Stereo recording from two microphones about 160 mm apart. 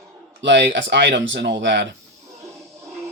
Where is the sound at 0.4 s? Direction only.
90° right.